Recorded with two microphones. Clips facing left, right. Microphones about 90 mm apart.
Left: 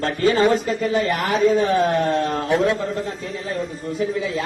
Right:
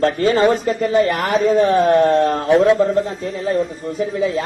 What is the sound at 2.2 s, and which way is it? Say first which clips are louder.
Speech: right 5 dB; 35° right (ahead or behind).